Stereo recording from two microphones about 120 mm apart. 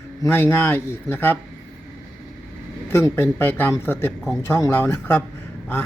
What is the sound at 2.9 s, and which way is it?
A man's voice, 20° left (ahead or behind).